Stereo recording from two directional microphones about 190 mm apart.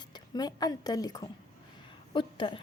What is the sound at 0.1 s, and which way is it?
A woman's voice, 20° left (ahead or behind).